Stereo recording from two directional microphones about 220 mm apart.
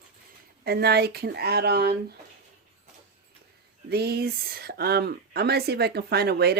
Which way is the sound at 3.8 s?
45° right (ahead or behind).